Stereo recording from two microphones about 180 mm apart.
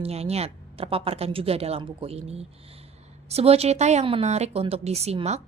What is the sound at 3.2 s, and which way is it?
A woman's voice, 35° right (ahead or behind).